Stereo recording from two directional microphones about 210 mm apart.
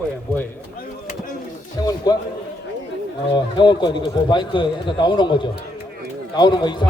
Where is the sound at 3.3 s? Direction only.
20° left (ahead or behind).